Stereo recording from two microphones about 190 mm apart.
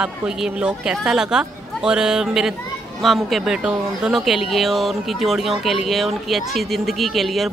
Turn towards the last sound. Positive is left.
turn(degrees=0)  # may be behind; listen again after turning